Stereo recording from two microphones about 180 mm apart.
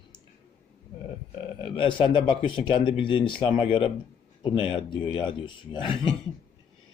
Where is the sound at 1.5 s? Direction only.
30° left (ahead or behind).